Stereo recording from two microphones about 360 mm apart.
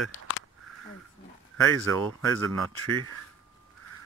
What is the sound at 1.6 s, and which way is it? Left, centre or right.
Speech, centre.